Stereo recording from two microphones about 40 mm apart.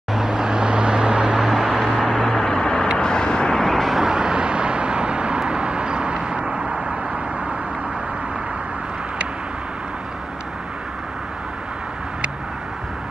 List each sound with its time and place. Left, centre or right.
0.1 s vehicle: centre
1.4 s vehicle: centre
2.0 s vehicle: centre
3.6 s vehicle: centre
4.0 s vehicle: centre